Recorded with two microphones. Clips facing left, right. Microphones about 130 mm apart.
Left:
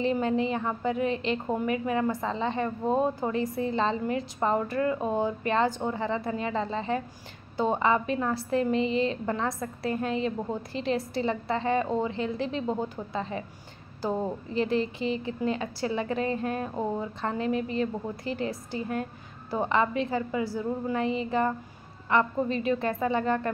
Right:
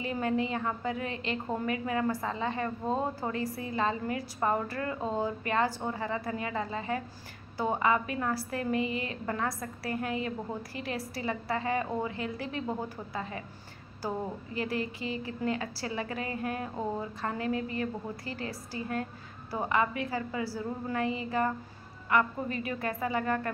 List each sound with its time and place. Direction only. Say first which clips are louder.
0.0 s a woman's voice: left 5 dB; 25° left (ahead or behind)